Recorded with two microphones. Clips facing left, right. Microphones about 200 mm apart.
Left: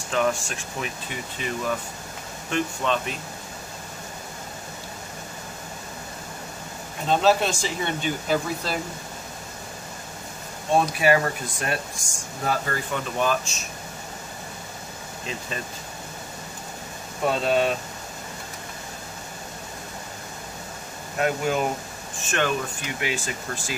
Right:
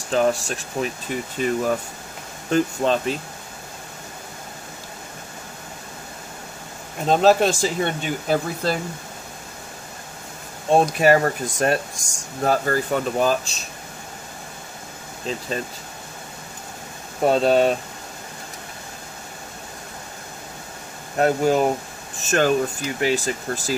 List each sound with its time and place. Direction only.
0.1 s speech: 35° right (ahead or behind)
7.1 s speech: 45° right (ahead or behind)
10.8 s speech: 40° right (ahead or behind)
17.2 s speech: 40° right (ahead or behind)
21.2 s speech: 35° right (ahead or behind)